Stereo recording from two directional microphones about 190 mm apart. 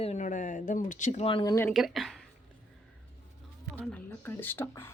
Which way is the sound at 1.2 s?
25° left (ahead or behind).